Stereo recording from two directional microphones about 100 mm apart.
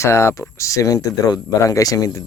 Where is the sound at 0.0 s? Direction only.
30° left (ahead or behind).